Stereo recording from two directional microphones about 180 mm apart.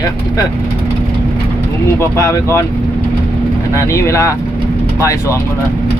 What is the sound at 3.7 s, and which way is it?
Speech, 15° left (ahead or behind).